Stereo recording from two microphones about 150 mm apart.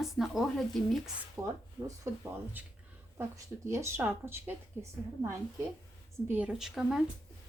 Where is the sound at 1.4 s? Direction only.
15° right (ahead or behind).